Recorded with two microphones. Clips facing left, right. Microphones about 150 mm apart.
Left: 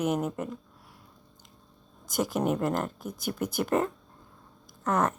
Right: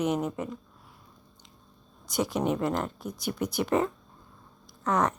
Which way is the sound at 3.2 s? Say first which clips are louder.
Even; 50° left (ahead or behind).